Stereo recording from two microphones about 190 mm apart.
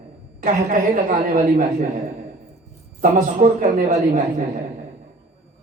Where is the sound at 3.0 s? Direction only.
40° right (ahead or behind).